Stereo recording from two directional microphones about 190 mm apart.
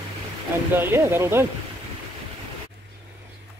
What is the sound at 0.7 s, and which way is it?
Speech, 15° right (ahead or behind).